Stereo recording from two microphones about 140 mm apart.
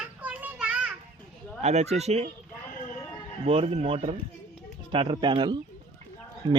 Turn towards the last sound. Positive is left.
turn(degrees=-30)  # may be behind; listen again after turning